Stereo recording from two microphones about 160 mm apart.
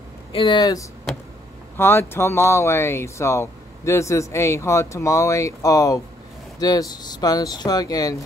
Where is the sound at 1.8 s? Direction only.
15° left (ahead or behind).